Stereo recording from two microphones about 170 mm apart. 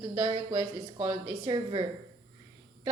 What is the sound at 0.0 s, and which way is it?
A woman's voice, 25° right (ahead or behind).